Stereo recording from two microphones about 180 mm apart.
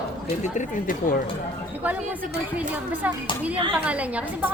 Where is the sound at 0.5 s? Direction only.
45° left (ahead or behind).